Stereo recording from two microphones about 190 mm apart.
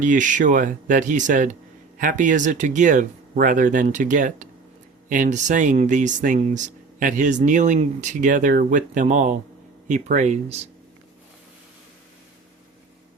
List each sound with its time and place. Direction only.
0.0 s speech: 45° right (ahead or behind)